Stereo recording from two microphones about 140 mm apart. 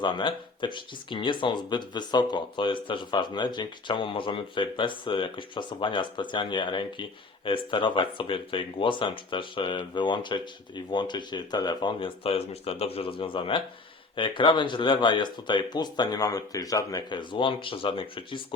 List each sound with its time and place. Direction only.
0.0 s speech: 35° left (ahead or behind)